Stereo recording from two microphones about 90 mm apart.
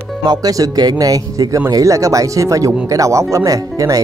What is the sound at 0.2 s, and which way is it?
Speech, 50° right (ahead or behind).